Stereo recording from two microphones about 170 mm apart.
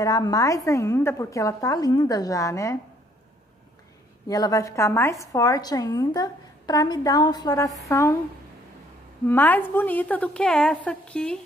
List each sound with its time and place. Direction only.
0.0 s a woman's voice: 20° left (ahead or behind)
4.3 s a woman's voice: 20° left (ahead or behind)
9.3 s a woman's voice: 10° left (ahead or behind)